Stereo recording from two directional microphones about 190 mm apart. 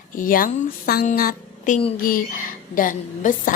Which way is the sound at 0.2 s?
45° left (ahead or behind).